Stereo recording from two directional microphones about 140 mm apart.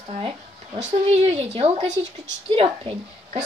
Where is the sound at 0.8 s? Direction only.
50° right (ahead or behind).